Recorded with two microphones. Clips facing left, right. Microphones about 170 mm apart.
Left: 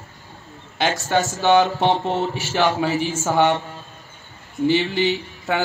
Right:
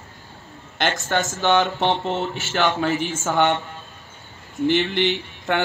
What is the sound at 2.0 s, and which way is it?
Speech, 40° left (ahead or behind).